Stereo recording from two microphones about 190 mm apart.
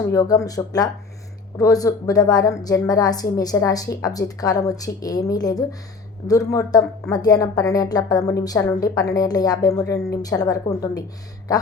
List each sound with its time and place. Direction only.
0.1 s a woman's voice: 15° left (ahead or behind)